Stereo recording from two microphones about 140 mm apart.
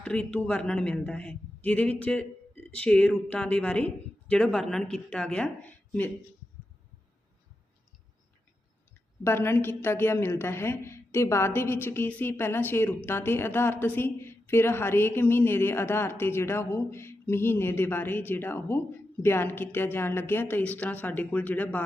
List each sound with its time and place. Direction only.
0.0 s a woman's voice: 10° left (ahead or behind)
9.2 s a woman's voice: 15° left (ahead or behind)